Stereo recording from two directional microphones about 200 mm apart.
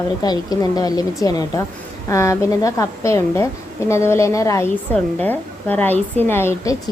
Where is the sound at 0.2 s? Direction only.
20° left (ahead or behind).